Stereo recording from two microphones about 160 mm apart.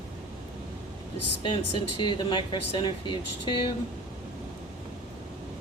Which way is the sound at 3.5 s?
30° left (ahead or behind).